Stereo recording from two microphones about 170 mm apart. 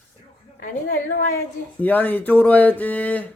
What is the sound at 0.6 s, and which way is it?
Speech, 65° left (ahead or behind).